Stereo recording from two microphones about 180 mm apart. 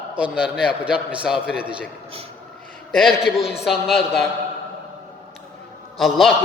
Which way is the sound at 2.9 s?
Centre (ahead or behind).